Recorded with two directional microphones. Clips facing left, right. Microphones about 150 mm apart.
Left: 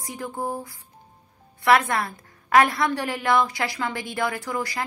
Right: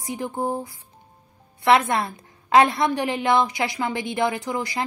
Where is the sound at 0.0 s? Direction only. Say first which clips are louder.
Right 4 dB; 20° right (ahead or behind).